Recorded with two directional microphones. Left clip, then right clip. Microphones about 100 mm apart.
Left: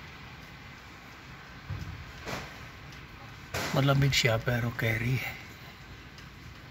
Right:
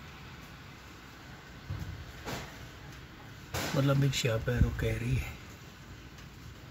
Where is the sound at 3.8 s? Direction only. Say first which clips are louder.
Left 5 dB; 45° left (ahead or behind).